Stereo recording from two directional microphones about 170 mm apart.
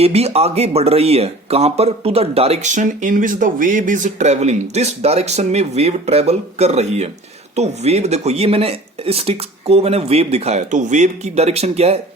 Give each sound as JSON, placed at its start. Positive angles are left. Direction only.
{"t": 0.0, "sound": "speech", "side_deg": -40}